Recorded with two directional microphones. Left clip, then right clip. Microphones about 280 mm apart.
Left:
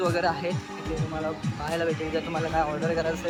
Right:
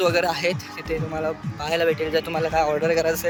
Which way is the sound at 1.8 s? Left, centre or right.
Right.